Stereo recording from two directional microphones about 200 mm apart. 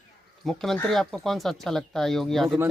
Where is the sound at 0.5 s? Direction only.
Centre (ahead or behind).